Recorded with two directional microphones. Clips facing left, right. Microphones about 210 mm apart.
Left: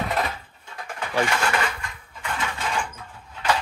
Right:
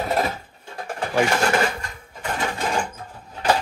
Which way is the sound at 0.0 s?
40° right (ahead or behind).